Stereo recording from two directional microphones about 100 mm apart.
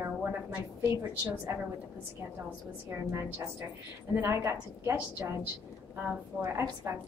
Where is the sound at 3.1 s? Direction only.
30° right (ahead or behind).